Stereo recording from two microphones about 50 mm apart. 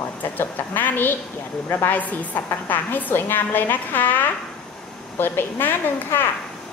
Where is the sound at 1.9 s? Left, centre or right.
Left.